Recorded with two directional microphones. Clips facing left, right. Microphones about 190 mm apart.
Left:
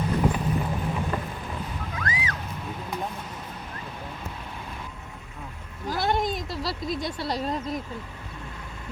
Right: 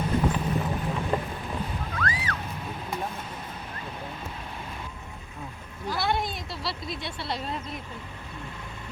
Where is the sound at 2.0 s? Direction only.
20° left (ahead or behind).